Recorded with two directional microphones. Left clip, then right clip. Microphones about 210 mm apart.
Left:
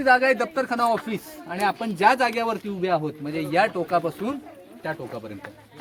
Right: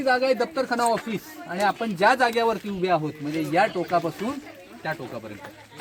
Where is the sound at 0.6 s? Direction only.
30° right (ahead or behind).